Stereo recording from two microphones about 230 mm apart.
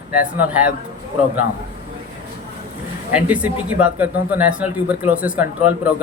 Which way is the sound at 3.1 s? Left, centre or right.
Centre.